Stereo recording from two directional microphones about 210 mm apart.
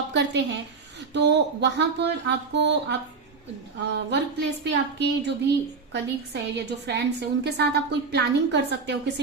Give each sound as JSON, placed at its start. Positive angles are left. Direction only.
{"t": 0.1, "sound": "a woman's voice", "side_deg": -55}